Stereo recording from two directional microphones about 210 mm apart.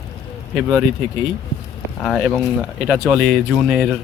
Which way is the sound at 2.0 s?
Centre (ahead or behind).